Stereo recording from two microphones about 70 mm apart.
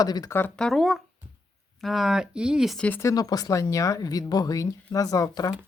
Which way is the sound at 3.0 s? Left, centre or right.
Left.